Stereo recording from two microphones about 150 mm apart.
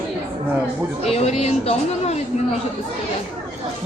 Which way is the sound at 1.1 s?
45° left (ahead or behind).